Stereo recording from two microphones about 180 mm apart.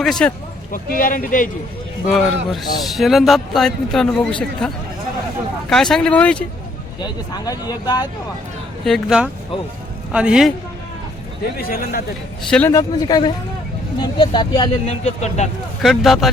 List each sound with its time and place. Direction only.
0.0 s speech: 5° left (ahead or behind)
0.7 s speech: 50° left (ahead or behind)
2.1 s speech: centre (ahead or behind)
7.0 s speech: 20° left (ahead or behind)
8.8 s speech: centre (ahead or behind)
11.5 s a man's voice: 55° left (ahead or behind)
12.4 s a man's voice: 5° left (ahead or behind); by 14.7 s 25° left (ahead or behind)
14.8 s speech: 40° left (ahead or behind)
15.8 s speech: centre (ahead or behind)